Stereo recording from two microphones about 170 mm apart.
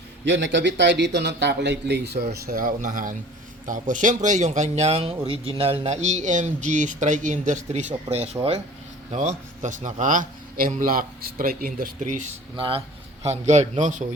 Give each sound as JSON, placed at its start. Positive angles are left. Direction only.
{"t": 0.3, "sound": "a man's voice", "side_deg": -90}
{"t": 8.4, "sound": "speech", "side_deg": -20}
{"t": 9.1, "sound": "speech", "side_deg": -45}
{"t": 12.5, "sound": "speech", "side_deg": -30}